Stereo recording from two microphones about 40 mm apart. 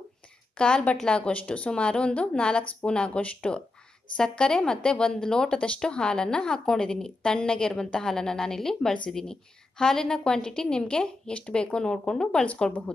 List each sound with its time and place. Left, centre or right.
0.6 s a woman's voice: left